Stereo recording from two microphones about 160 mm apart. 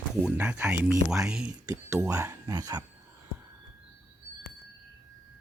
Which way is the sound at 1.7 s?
20° right (ahead or behind).